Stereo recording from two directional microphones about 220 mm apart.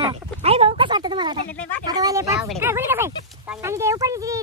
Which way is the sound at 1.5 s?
5° left (ahead or behind).